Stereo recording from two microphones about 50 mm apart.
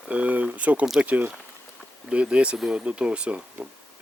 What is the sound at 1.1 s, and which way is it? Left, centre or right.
Speech, right.